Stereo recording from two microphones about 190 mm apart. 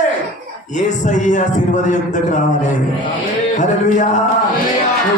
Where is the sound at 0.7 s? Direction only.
40° left (ahead or behind).